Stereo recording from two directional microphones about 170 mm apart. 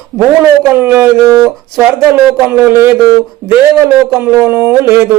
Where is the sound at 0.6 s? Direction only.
15° right (ahead or behind).